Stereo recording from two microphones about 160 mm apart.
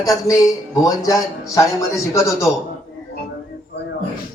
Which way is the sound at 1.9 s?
20° left (ahead or behind).